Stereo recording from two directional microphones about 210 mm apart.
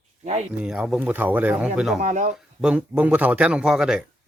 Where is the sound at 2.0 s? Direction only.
35° right (ahead or behind).